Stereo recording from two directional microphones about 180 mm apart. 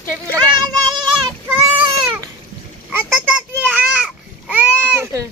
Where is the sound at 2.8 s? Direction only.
5° right (ahead or behind).